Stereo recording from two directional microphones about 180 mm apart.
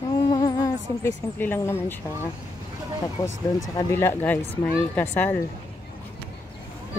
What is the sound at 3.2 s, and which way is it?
Speech, 20° left (ahead or behind).